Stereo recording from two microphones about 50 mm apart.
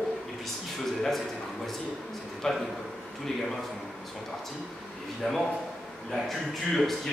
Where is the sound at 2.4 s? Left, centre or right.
Centre.